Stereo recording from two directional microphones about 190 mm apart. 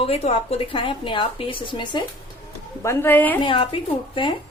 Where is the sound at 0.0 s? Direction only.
30° left (ahead or behind).